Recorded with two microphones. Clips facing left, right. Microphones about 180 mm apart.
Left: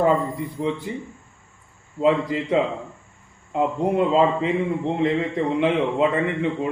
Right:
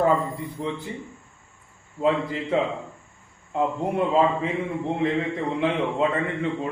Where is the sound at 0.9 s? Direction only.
20° left (ahead or behind).